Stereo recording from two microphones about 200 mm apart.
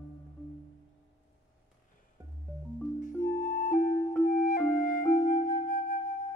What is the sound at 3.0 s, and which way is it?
Music, 40° left (ahead or behind).